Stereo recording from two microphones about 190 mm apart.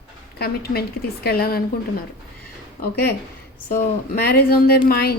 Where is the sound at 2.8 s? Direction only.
50° left (ahead or behind).